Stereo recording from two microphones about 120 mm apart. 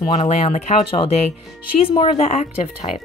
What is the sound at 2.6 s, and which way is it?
Speech, 55° left (ahead or behind).